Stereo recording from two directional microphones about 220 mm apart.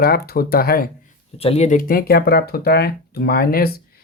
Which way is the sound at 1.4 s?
25° left (ahead or behind).